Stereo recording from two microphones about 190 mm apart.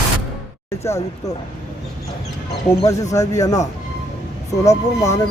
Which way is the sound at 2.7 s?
15° left (ahead or behind).